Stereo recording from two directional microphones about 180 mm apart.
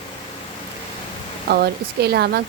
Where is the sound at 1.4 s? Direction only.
60° right (ahead or behind).